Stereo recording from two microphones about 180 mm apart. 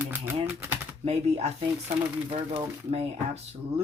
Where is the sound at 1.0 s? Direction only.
35° right (ahead or behind).